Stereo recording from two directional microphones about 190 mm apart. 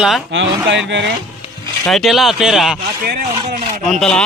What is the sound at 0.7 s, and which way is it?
Speech, 70° right (ahead or behind).